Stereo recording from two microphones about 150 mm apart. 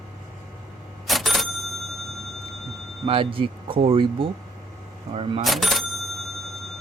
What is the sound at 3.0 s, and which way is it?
Speech, 35° right (ahead or behind).